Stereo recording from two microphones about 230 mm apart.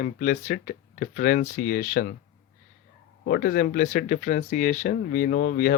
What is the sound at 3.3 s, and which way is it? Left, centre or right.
Speech, left.